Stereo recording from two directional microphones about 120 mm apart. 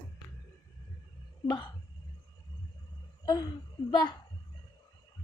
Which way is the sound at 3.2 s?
35° left (ahead or behind).